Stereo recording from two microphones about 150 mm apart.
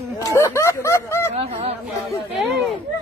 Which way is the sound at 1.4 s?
40° right (ahead or behind).